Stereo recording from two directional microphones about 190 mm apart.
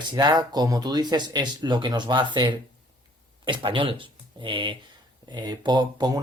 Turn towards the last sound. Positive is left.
turn(degrees=-20)  # may be behind; listen again after turning